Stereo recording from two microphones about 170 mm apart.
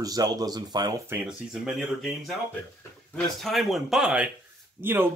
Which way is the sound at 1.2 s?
5° right (ahead or behind).